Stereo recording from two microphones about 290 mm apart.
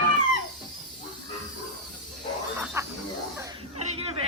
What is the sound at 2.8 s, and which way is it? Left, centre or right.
Snake, centre.